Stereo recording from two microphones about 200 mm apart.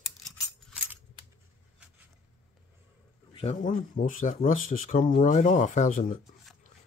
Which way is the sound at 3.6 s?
40° left (ahead or behind).